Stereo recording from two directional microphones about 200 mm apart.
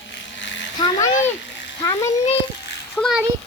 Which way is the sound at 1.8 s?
15° left (ahead or behind).